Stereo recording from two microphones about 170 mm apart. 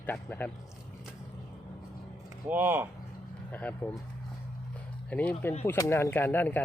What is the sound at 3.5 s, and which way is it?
Speech, 10° left (ahead or behind).